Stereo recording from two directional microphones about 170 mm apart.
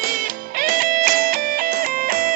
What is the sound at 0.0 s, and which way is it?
Music, 55° right (ahead or behind).